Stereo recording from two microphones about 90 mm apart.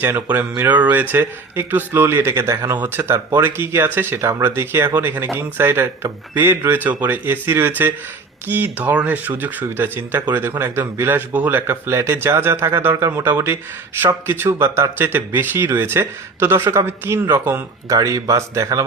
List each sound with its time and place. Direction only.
0.0 s speech: 20° right (ahead or behind)
17.8 s speech: 40° right (ahead or behind)